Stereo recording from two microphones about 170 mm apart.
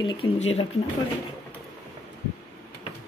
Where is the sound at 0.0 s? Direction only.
25° left (ahead or behind).